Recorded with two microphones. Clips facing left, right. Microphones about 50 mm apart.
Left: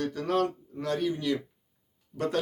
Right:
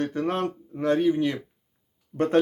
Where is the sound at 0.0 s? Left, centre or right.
Right.